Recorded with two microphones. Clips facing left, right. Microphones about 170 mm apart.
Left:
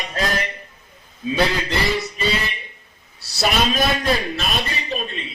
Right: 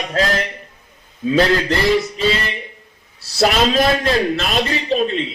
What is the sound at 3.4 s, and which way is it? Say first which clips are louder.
Speech: right 5 dB; 90° right.